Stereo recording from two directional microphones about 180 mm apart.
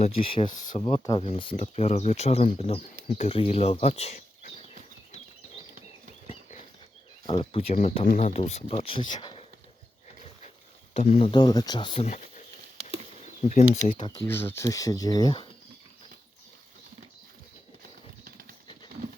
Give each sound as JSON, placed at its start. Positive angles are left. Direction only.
{"t": 0.0, "sound": "speech", "side_deg": 30}
{"t": 6.2, "sound": "horse", "side_deg": 35}
{"t": 7.3, "sound": "speech", "side_deg": 30}
{"t": 8.0, "sound": "speech", "side_deg": 45}
{"t": 9.2, "sound": "a sound", "side_deg": 35}
{"t": 10.9, "sound": "speech", "side_deg": 35}
{"t": 13.4, "sound": "speech", "side_deg": 40}
{"t": 13.8, "sound": "speech", "side_deg": 25}
{"t": 14.3, "sound": "speech", "side_deg": 10}
{"t": 18.3, "sound": "a sound", "side_deg": -50}